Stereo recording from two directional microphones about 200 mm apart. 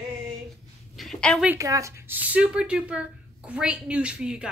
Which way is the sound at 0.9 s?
Centre (ahead or behind).